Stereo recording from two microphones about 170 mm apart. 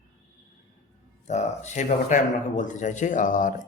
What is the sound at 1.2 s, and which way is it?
Speech, 40° left (ahead or behind).